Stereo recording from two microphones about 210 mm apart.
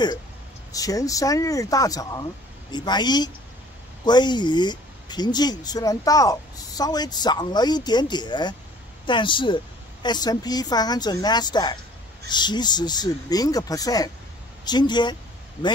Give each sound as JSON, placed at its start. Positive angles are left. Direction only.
{"t": 0.7, "sound": "speech", "side_deg": 15}